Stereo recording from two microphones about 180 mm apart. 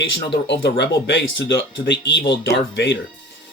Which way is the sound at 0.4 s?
75° left (ahead or behind).